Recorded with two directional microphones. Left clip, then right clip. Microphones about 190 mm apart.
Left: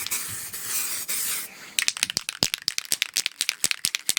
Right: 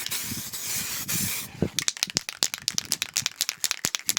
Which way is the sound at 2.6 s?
50° right (ahead or behind).